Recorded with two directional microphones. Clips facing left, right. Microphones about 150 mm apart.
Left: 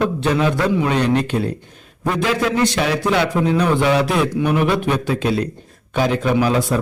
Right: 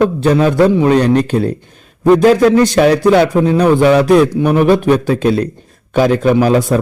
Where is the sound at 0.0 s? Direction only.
40° right (ahead or behind).